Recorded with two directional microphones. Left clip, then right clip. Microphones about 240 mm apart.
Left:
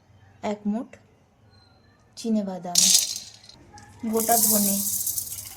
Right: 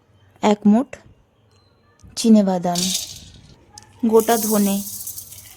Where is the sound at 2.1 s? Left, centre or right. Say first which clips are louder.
Right 12 dB; right.